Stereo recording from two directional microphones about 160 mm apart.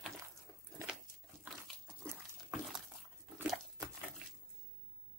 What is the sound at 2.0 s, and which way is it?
Dog, 5° left (ahead or behind).